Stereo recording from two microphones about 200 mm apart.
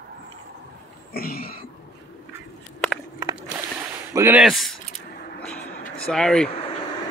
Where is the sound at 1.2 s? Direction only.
50° left (ahead or behind).